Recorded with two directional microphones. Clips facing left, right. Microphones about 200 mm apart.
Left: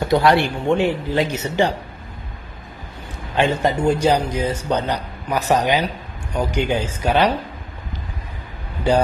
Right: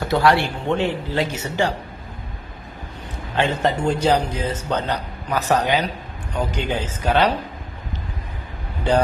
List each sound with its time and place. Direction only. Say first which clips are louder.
0.1 s a man's voice: left 2 dB; 15° left (ahead or behind)
3.3 s a man's voice: left 2 dB; 10° left (ahead or behind)